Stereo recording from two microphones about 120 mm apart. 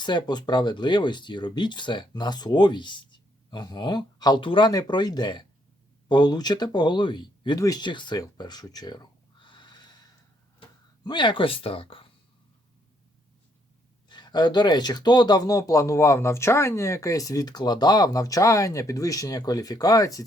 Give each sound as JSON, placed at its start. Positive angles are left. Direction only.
{"t": 0.0, "sound": "speech", "side_deg": 35}
{"t": 11.0, "sound": "speech", "side_deg": 40}
{"t": 14.1, "sound": "speech", "side_deg": 35}